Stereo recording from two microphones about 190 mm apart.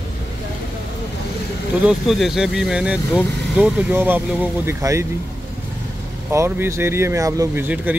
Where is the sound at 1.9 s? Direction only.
Centre (ahead or behind).